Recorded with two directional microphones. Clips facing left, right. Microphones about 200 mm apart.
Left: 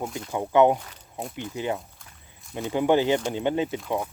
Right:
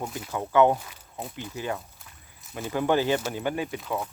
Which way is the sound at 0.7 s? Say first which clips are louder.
Left 1 dB; 5° right (ahead or behind).